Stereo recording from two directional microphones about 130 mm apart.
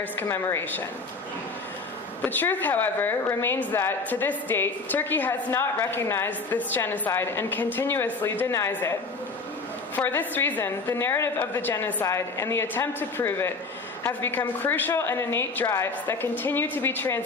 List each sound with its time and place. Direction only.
0.0 s a woman's voice: 20° left (ahead or behind)
2.2 s a woman's voice: 15° left (ahead or behind)